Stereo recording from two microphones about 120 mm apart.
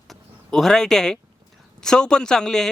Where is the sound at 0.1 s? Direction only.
Centre (ahead or behind).